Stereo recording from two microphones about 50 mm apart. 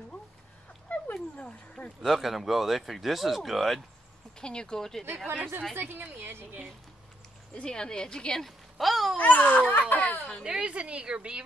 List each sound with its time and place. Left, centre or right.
0.8 s dog: left
2.0 s speech: centre
4.4 s a woman's voice: centre
5.2 s speech: right
7.6 s a woman's voice: centre
9.1 s a sound: left
10.4 s a woman's voice: centre